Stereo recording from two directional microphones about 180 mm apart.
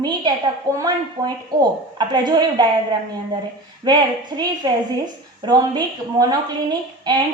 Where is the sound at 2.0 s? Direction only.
25° right (ahead or behind).